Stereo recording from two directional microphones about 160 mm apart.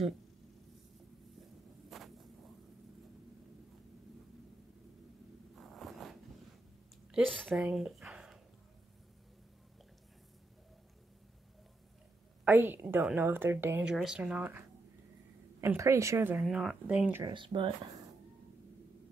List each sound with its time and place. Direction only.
1.9 s vehicle: centre (ahead or behind)
5.6 s zipper: centre (ahead or behind)
7.1 s speech: centre (ahead or behind)
7.6 s a sound: centre (ahead or behind)
12.4 s a woman's voice: 15° right (ahead or behind)
15.6 s a woman's voice: 15° right (ahead or behind)
17.2 s speech: 30° right (ahead or behind)